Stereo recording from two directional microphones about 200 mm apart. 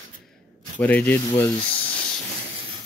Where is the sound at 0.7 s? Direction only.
10° left (ahead or behind).